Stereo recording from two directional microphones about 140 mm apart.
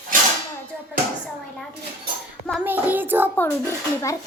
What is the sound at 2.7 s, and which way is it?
Child singing, 15° right (ahead or behind).